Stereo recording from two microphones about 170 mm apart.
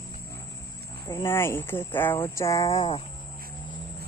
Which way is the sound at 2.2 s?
15° left (ahead or behind).